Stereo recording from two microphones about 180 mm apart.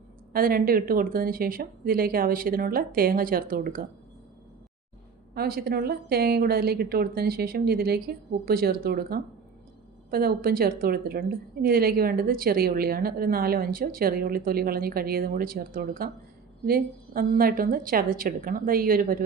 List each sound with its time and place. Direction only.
0.3 s speech: 55° right (ahead or behind)
5.3 s a woman's voice: 60° right (ahead or behind)